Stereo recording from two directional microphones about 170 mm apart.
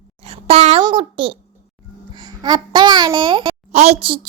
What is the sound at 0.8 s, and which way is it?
A child's voice, 30° right (ahead or behind).